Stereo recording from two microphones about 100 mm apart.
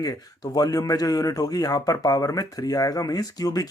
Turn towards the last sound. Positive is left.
turn(degrees=40)  # may be behind; listen again after turning